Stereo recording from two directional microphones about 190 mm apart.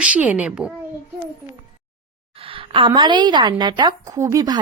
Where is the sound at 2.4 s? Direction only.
30° right (ahead or behind).